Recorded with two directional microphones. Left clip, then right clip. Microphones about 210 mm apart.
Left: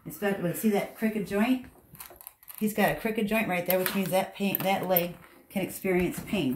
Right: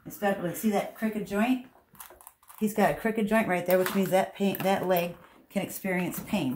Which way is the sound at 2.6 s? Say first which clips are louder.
Right 1 dB; 15° right (ahead or behind).